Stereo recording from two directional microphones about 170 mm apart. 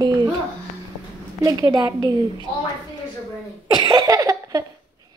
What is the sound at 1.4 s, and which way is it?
A woman's voice, 20° right (ahead or behind).